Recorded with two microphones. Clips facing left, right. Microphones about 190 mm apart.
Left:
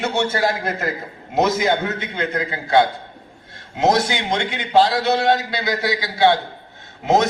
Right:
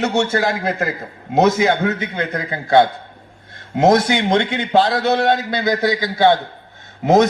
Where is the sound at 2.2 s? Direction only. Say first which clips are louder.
Even; 50° right (ahead or behind).